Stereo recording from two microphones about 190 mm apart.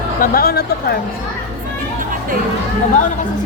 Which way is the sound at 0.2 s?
50° left (ahead or behind).